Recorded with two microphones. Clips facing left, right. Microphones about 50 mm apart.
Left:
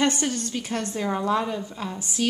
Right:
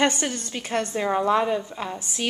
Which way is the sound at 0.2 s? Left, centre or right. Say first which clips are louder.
Left 2 dB; right.